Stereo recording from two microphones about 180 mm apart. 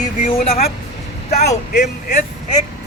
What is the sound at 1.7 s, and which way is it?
Speech, 60° left (ahead or behind).